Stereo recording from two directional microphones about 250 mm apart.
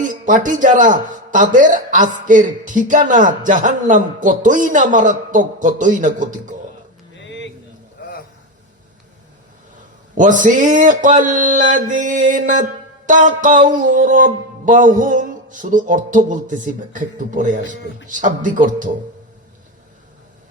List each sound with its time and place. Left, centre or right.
0.0 s speech: right
7.2 s a sound: left
10.2 s speech: right